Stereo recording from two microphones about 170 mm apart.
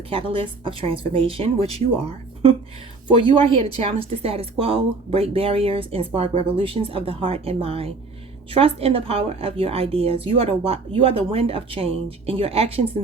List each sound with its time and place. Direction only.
0.1 s a woman's voice: 35° right (ahead or behind)
3.1 s a woman's voice: 30° right (ahead or behind)